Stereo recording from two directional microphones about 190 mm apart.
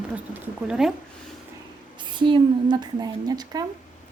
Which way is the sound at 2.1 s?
25° right (ahead or behind).